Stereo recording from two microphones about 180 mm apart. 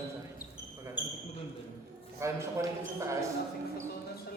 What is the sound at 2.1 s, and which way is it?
A man's voice, 15° right (ahead or behind).